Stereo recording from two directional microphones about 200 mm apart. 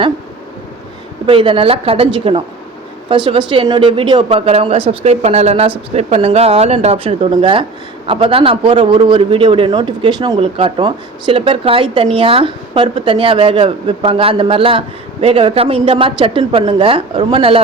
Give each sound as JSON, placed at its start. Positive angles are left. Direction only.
{"t": 1.3, "sound": "a man's voice", "side_deg": -25}